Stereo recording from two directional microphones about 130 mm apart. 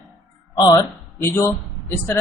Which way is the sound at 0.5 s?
30° left (ahead or behind).